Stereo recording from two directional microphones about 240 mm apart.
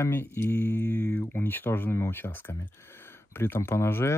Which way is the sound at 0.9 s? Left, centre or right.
Right.